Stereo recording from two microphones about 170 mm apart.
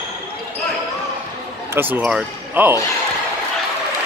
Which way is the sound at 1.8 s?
10° right (ahead or behind).